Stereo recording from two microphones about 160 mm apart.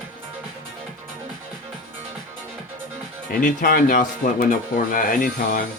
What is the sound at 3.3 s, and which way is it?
Speech, 60° left (ahead or behind).